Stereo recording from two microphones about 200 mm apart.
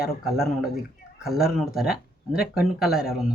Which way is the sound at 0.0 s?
5° right (ahead or behind).